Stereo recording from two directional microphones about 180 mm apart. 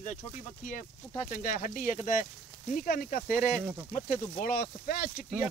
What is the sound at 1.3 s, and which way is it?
Speech, 50° left (ahead or behind).